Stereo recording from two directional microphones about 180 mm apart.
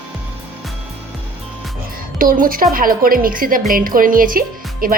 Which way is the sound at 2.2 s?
50° right (ahead or behind).